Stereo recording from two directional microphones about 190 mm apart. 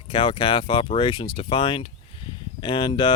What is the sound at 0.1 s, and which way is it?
Speech, 25° left (ahead or behind).